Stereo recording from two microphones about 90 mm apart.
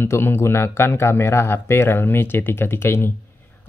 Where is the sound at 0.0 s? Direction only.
25° left (ahead or behind).